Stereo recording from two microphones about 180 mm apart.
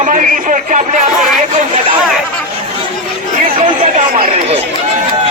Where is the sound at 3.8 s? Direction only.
45° right (ahead or behind).